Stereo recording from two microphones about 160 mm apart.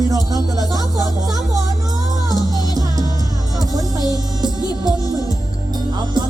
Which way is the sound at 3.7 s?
25° right (ahead or behind).